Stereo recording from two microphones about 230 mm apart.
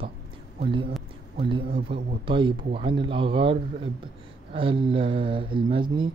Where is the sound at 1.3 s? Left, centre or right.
Right.